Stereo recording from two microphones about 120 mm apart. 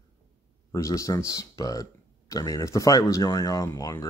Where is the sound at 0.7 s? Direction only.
25° left (ahead or behind).